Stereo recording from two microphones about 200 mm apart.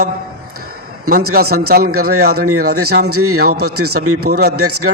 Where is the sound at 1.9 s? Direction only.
90° right.